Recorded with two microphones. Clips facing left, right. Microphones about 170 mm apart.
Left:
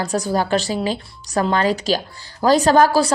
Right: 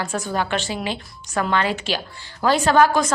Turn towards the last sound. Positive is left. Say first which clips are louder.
# left 2 dB
turn(degrees=35)  # may be behind; listen again after turning